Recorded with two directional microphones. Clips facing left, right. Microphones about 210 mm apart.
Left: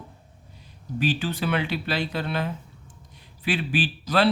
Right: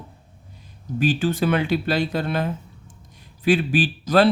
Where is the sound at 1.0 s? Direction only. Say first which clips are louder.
Right 5 dB; 45° right (ahead or behind).